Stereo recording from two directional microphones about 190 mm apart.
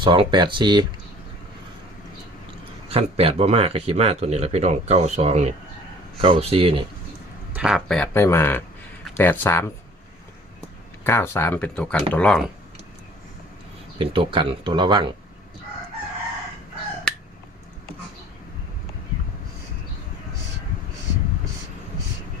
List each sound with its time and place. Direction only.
0.0 s speech: 25° right (ahead or behind)
2.9 s speech: 30° right (ahead or behind)
7.5 s speech: 5° right (ahead or behind); by 9.6 s 10° left (ahead or behind)
11.0 s speech: 15° left (ahead or behind)
14.0 s speech: 25° right (ahead or behind)